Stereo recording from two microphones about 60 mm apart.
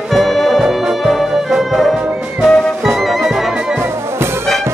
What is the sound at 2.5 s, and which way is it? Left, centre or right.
Music, centre.